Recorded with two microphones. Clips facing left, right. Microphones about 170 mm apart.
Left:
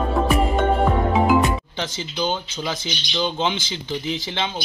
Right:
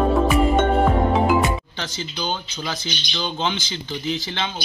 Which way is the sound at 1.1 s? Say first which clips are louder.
Left 1 dB; centre (ahead or behind).